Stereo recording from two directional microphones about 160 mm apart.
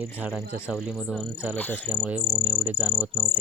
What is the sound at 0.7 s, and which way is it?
Cricket, 5° right (ahead or behind).